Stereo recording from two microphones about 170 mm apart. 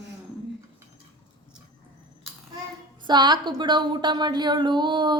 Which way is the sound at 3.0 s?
25° right (ahead or behind).